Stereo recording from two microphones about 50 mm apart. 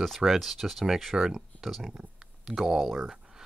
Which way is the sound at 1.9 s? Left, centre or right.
Centre.